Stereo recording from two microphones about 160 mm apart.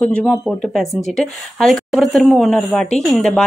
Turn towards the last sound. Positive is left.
turn(degrees=5)  # may be behind; listen again after turning